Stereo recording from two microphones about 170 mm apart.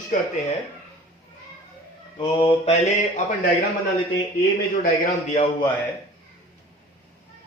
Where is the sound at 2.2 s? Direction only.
30° left (ahead or behind).